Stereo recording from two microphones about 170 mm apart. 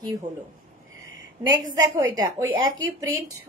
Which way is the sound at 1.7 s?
20° right (ahead or behind).